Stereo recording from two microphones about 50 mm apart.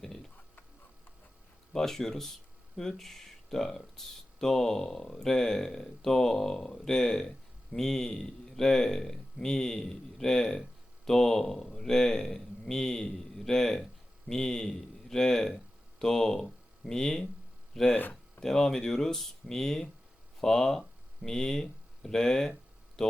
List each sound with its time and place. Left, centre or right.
0.0 s a sound: centre
1.7 s speech: centre
17.9 s speech: left
18.3 s speech: centre